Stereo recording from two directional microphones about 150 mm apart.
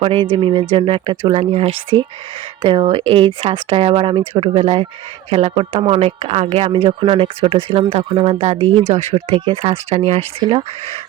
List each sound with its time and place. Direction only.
0.0 s speech: 35° right (ahead or behind)